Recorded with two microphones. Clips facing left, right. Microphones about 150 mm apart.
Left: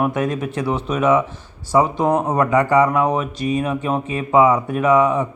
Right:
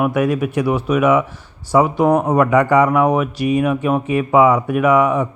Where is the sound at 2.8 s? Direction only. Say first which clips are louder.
Right 3 dB; 20° left (ahead or behind).